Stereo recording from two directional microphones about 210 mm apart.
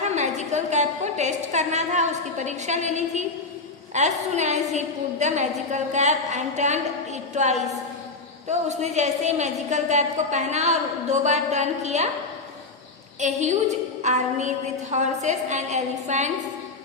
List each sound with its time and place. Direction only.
0.0 s a woman's voice: 35° right (ahead or behind)
13.1 s a woman's voice: 35° right (ahead or behind)